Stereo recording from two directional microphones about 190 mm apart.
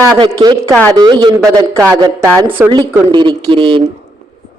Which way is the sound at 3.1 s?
25° right (ahead or behind).